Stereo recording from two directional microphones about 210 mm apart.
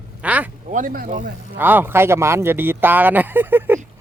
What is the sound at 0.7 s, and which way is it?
Speech, 40° right (ahead or behind).